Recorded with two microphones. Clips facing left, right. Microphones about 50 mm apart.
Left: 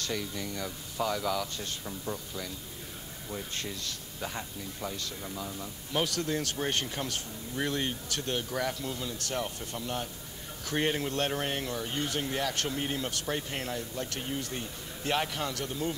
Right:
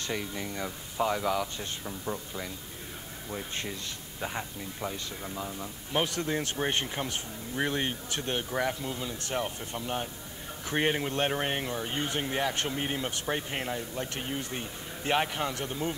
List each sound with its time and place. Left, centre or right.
0.0 s speech: right